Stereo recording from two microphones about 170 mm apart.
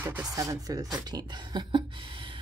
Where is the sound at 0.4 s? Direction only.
20° right (ahead or behind).